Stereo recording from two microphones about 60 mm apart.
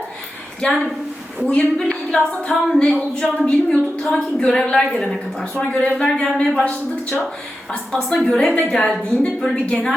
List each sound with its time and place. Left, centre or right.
0.6 s a woman's voice: centre
7.9 s a woman's voice: centre